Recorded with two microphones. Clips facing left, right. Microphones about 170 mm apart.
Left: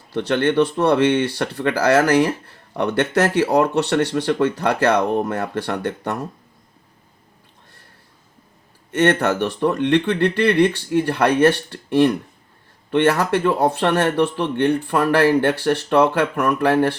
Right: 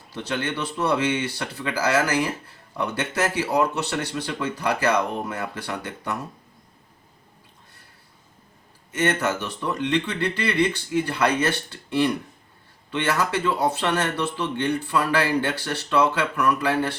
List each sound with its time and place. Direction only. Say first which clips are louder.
0.1 s speech: left 9 dB; 60° left (ahead or behind)
8.9 s speech: left 6 dB; 65° left (ahead or behind)